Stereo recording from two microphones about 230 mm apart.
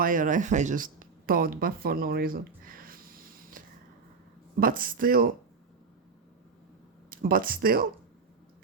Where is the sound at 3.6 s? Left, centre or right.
Right.